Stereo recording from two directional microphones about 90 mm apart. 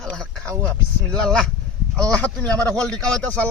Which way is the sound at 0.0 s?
5° left (ahead or behind).